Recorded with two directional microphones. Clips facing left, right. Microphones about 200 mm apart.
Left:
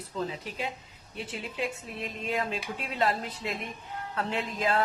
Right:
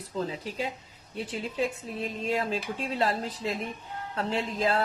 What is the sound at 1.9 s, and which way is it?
Music, 35° right (ahead or behind).